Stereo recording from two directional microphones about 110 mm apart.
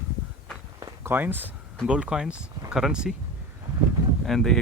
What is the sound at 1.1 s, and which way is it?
Speech, 20° right (ahead or behind).